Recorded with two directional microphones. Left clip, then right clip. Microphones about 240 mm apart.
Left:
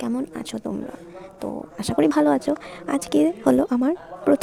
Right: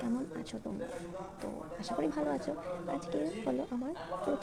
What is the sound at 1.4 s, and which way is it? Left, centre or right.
A woman's voice, left.